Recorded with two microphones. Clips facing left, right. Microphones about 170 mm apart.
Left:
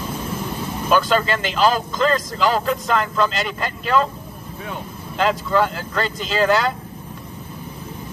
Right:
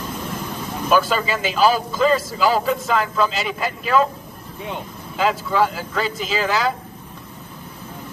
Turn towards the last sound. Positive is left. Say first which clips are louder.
# left 3 dB
turn(degrees=0)  # may be behind; listen again after turning